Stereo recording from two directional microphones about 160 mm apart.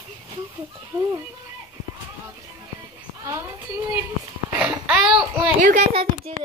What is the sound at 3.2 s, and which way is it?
Speech, 15° right (ahead or behind).